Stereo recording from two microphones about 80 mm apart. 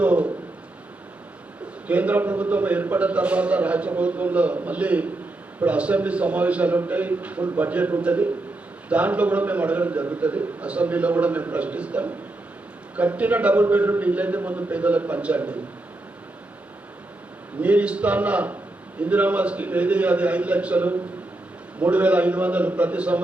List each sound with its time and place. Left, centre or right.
0.0 s a sound: centre
1.9 s a man's voice: centre
17.6 s a man's voice: centre